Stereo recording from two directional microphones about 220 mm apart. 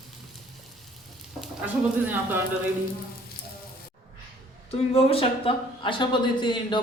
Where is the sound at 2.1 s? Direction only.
10° right (ahead or behind).